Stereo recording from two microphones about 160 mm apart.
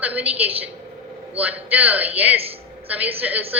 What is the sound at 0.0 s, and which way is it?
A woman's voice, 10° right (ahead or behind).